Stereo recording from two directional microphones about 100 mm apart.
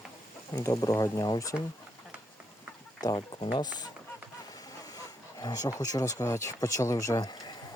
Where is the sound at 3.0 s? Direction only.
40° left (ahead or behind).